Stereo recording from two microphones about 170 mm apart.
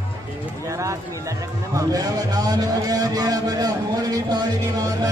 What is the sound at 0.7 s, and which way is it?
A man's voice, 20° right (ahead or behind).